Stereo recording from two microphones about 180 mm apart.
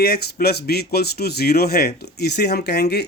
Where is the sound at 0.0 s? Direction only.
60° left (ahead or behind).